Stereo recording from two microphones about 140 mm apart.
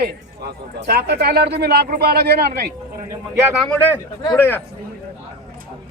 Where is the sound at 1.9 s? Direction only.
90° right.